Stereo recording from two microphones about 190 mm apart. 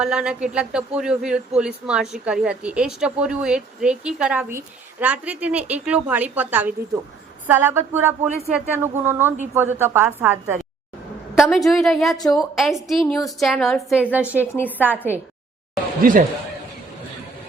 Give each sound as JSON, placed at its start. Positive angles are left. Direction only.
{"t": 0.0, "sound": "a woman's voice", "side_deg": -5}
{"t": 11.3, "sound": "a woman's voice", "side_deg": 0}
{"t": 14.5, "sound": "a woman's voice", "side_deg": 10}
{"t": 14.8, "sound": "a woman's voice", "side_deg": -10}
{"t": 16.0, "sound": "speech", "side_deg": -45}